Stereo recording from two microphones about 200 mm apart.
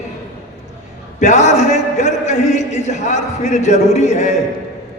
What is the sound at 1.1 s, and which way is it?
A man's voice, 35° left (ahead or behind).